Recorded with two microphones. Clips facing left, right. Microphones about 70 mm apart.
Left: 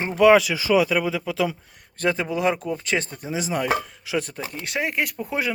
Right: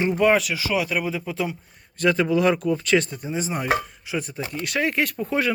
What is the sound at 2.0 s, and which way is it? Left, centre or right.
Speech, left.